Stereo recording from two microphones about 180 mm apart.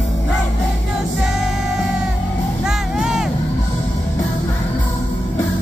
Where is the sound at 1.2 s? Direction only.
Centre (ahead or behind).